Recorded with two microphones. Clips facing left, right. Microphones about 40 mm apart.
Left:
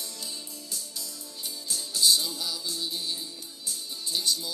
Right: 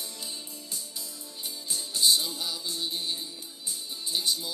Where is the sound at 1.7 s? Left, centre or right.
Centre.